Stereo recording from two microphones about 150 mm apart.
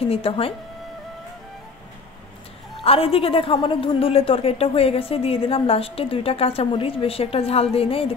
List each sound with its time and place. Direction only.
0.1 s a woman's voice: 40° left (ahead or behind)
2.8 s a woman's voice: 40° left (ahead or behind)